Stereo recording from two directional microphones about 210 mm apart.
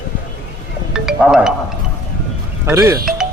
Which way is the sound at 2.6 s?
15° right (ahead or behind).